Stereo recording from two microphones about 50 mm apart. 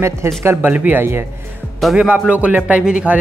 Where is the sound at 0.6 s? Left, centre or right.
Right.